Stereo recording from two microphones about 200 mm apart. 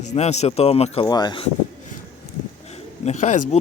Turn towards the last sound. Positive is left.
turn(degrees=35)  # may be behind; listen again after turning